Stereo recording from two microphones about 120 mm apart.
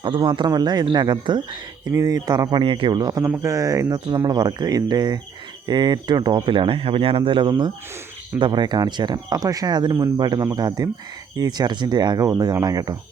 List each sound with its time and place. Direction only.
0.0 s speech: 45° right (ahead or behind)